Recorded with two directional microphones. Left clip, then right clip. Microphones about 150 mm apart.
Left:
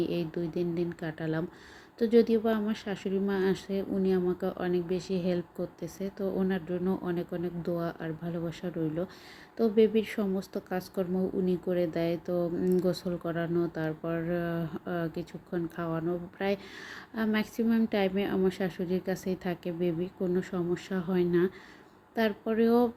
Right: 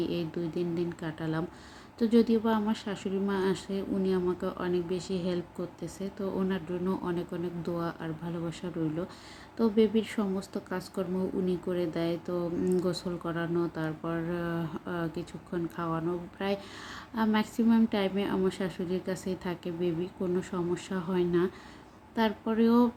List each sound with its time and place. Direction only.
0.0 s speech: 15° left (ahead or behind)